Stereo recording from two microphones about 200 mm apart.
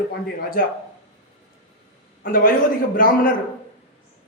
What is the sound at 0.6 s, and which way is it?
Speech, 45° left (ahead or behind).